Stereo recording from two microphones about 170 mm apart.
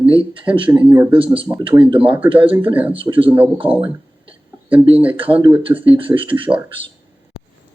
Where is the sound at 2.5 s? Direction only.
10° right (ahead or behind).